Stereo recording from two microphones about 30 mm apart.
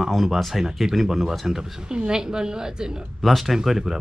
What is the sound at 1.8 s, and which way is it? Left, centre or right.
Speech, right.